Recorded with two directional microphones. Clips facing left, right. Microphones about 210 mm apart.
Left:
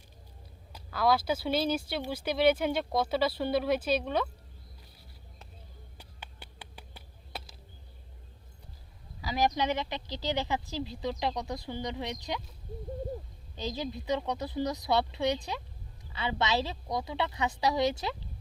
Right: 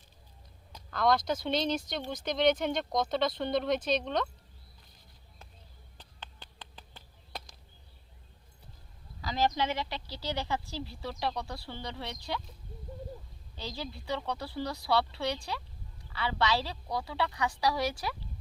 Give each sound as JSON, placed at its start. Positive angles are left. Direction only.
{"t": 0.7, "sound": "speech", "side_deg": 5}
{"t": 6.0, "sound": "a sound", "side_deg": 10}
{"t": 9.2, "sound": "speech", "side_deg": 15}
{"t": 13.6, "sound": "speech", "side_deg": 20}